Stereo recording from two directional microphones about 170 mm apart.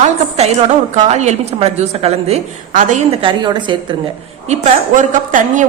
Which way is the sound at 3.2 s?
30° right (ahead or behind).